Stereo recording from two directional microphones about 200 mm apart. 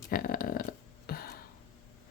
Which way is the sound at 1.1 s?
50° left (ahead or behind).